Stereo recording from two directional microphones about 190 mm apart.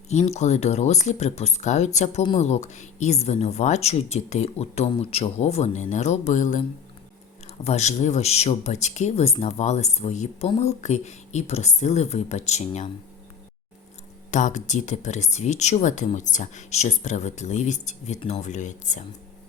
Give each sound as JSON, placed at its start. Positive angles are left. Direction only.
{"t": 0.1, "sound": "speech", "side_deg": 35}
{"t": 14.3, "sound": "speech", "side_deg": 40}